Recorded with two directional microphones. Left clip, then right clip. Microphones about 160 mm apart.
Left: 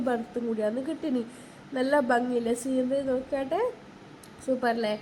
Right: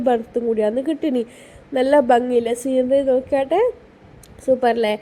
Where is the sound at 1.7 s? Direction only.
20° right (ahead or behind).